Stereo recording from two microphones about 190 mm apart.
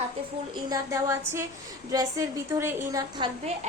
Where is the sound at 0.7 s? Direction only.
15° right (ahead or behind).